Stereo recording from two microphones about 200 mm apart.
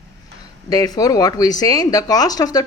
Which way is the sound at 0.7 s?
20° left (ahead or behind).